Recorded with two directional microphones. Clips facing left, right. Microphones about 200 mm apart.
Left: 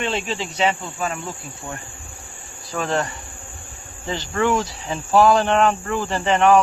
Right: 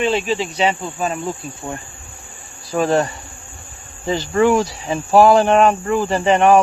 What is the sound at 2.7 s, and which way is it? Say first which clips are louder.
Speech: right 6 dB; 20° right (ahead or behind).